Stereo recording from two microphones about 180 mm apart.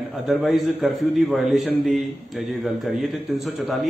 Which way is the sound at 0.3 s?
Centre (ahead or behind).